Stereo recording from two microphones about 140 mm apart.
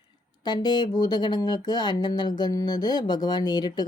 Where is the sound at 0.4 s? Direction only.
30° left (ahead or behind).